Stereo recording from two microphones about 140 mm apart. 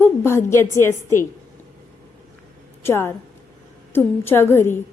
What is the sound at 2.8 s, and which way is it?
A woman's voice, 15° left (ahead or behind).